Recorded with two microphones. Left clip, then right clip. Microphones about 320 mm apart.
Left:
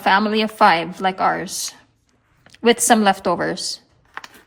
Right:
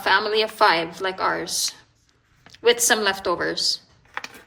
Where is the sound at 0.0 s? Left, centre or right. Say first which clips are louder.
Left 3 dB; left.